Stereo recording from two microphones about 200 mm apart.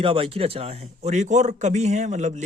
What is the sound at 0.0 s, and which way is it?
A man's voice, 30° right (ahead or behind).